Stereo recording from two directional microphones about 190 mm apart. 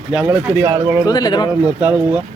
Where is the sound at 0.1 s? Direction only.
10° right (ahead or behind).